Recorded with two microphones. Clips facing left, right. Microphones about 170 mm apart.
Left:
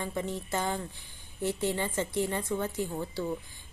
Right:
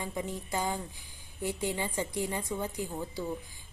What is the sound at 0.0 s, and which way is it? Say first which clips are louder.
Speech: left 2 dB; 15° right (ahead or behind).